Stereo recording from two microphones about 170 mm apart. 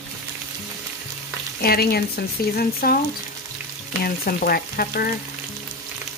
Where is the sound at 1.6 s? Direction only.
65° left (ahead or behind).